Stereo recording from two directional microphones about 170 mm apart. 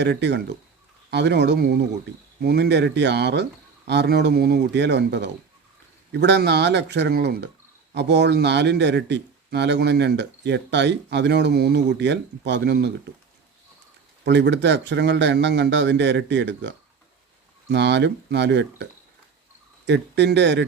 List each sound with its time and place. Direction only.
0.0 s a man's voice: 90° right
7.9 s a man's voice: 90° right
14.3 s a man's voice: 90° right